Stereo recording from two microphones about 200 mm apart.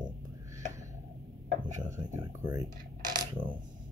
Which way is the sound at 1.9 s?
15° right (ahead or behind).